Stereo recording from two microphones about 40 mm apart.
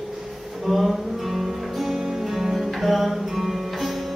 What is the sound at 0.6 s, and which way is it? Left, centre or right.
Music, centre.